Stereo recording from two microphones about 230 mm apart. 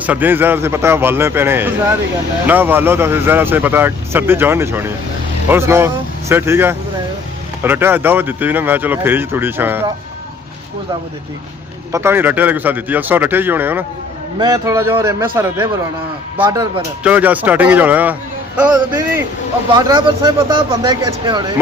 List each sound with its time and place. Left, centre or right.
0.0 s speech: centre
11.9 s speech: centre
19.7 s speech: centre